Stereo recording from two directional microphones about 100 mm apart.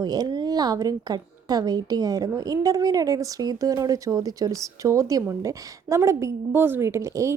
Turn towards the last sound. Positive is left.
turn(degrees=-30)  # may be behind; listen again after turning